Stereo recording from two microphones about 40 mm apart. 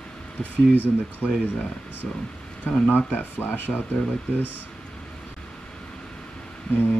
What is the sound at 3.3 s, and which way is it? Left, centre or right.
Speech, left.